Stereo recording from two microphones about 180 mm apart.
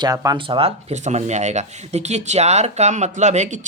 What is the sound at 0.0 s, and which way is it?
Speech, 20° right (ahead or behind).